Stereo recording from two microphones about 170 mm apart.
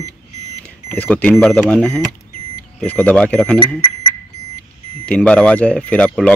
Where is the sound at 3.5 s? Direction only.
25° left (ahead or behind).